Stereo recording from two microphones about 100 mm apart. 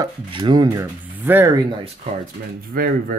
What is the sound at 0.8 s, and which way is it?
Speech, 20° right (ahead or behind).